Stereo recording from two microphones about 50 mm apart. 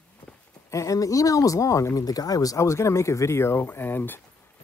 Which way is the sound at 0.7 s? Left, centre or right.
Left.